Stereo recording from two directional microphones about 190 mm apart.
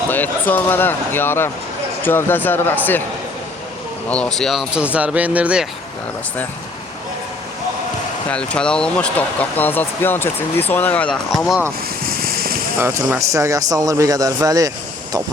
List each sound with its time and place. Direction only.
0.1 s speech: 10° left (ahead or behind)
4.1 s speech: 5° left (ahead or behind)
8.3 s speech: 5° left (ahead or behind)
12.0 s a sound: 50° right (ahead or behind)
12.8 s speech: 15° right (ahead or behind)